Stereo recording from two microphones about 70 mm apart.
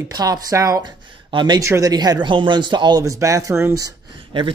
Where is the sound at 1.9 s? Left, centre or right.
Right.